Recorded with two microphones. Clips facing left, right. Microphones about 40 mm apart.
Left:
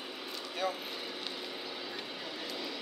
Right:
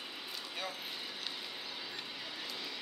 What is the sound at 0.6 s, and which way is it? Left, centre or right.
Speech, centre.